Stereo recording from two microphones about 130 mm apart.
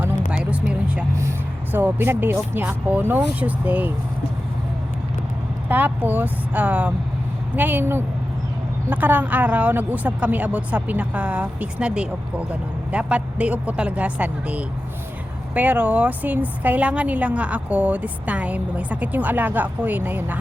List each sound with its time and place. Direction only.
0.3 s a sound: 10° right (ahead or behind)
0.7 s vehicle: 10° right (ahead or behind)
1.7 s speech: 15° right (ahead or behind)
5.6 s speech: 15° right (ahead or behind)